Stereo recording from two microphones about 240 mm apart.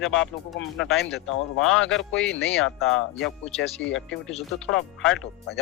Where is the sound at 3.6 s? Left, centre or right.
Left.